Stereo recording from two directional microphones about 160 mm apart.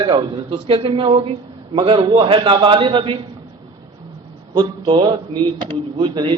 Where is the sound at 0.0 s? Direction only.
30° right (ahead or behind).